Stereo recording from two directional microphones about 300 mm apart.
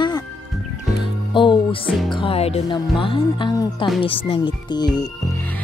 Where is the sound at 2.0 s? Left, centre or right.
Centre.